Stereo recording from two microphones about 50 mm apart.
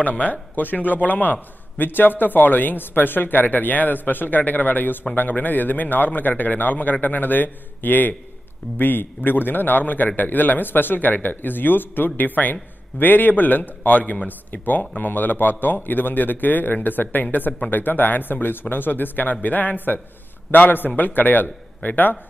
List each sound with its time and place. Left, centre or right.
0.0 s a man's voice: left